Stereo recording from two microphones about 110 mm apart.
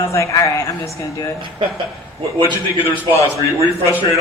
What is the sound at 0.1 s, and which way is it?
Speech, 25° left (ahead or behind).